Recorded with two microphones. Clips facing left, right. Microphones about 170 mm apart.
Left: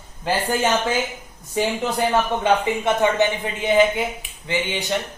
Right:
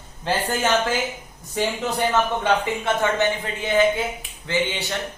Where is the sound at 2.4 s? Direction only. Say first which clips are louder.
Left 2 dB; 15° left (ahead or behind).